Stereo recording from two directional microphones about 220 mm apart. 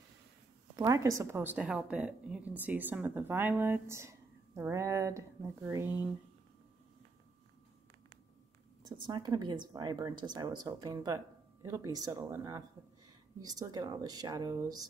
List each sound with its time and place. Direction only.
0.7 s speech: 15° right (ahead or behind)
8.8 s speech: 20° right (ahead or behind)